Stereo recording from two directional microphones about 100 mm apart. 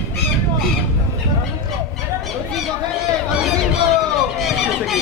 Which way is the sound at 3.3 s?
5° right (ahead or behind).